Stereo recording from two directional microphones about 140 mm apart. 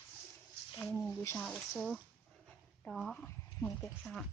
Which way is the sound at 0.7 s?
10° left (ahead or behind).